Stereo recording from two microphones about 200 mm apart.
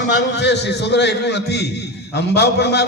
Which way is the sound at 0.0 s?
60° left (ahead or behind).